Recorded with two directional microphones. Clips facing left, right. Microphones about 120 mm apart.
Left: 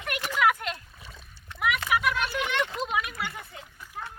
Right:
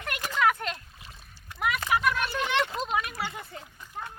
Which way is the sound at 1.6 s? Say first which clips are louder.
Even; 35° right (ahead or behind).